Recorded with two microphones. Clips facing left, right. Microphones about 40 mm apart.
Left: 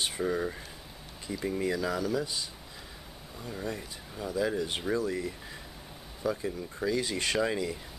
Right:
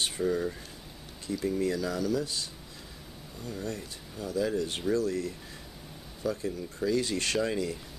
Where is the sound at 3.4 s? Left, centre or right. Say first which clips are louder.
Even; centre.